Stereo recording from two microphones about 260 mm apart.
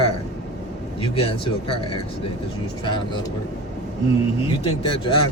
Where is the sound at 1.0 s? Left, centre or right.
Left.